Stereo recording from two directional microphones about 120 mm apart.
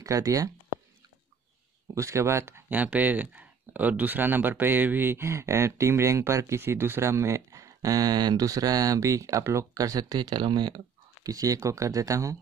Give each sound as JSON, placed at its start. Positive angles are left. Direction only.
{"t": 0.0, "sound": "speech", "side_deg": -30}
{"t": 2.0, "sound": "speech", "side_deg": -25}